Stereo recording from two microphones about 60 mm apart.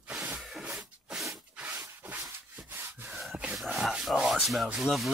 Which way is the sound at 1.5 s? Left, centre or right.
Right.